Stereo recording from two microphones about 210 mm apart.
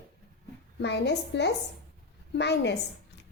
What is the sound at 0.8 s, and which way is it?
A woman's voice, 55° left (ahead or behind).